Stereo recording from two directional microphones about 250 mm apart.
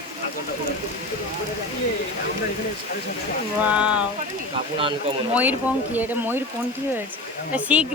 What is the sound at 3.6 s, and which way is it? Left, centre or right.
Speech, centre.